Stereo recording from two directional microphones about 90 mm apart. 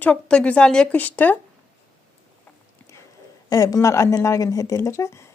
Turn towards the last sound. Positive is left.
turn(degrees=35)  # may be behind; listen again after turning